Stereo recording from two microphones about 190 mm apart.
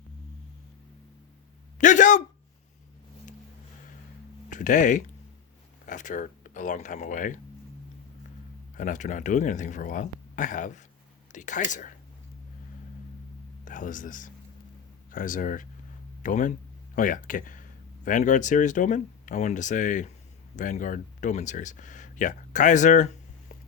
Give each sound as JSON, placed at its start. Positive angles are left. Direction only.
{"t": 1.8, "sound": "a man's voice", "side_deg": 40}
{"t": 4.4, "sound": "speech", "side_deg": 40}
{"t": 8.7, "sound": "speech", "side_deg": 40}
{"t": 13.7, "sound": "speech", "side_deg": 45}